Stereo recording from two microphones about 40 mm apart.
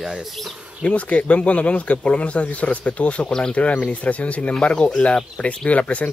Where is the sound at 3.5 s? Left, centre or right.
Left.